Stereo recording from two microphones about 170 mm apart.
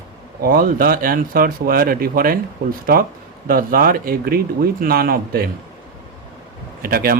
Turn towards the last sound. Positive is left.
turn(degrees=-60)  # may be behind; listen again after turning